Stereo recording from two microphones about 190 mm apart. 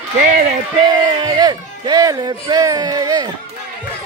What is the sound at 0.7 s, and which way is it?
Speech, 25° right (ahead or behind).